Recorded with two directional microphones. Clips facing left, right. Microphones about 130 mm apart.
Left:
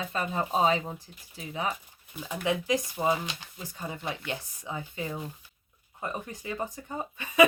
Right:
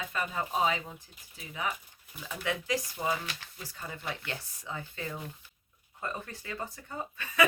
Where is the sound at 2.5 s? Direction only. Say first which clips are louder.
Left 5 dB; 20° left (ahead or behind).